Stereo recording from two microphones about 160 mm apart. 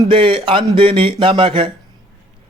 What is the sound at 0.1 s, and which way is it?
A man's voice, 30° right (ahead or behind).